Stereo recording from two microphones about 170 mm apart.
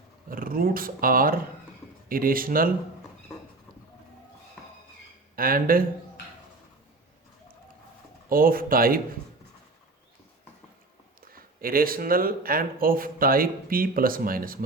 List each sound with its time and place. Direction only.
0.3 s speech: 55° right (ahead or behind)
5.4 s speech: 60° right (ahead or behind)
8.3 s speech: 55° right (ahead or behind)
11.2 s speech: 60° right (ahead or behind)